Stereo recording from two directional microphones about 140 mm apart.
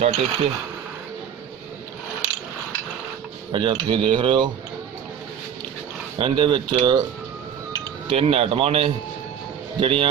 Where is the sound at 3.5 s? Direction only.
35° right (ahead or behind).